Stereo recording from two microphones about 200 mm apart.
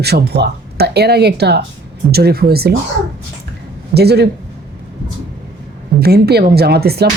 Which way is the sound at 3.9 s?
55° right (ahead or behind).